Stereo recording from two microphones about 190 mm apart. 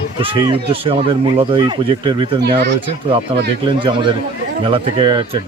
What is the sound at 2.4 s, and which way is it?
Speech, 60° right (ahead or behind).